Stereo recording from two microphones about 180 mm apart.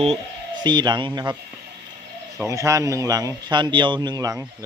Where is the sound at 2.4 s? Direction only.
15° right (ahead or behind).